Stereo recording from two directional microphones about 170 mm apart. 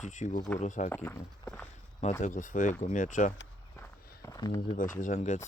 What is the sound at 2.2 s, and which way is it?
Speech, 50° left (ahead or behind).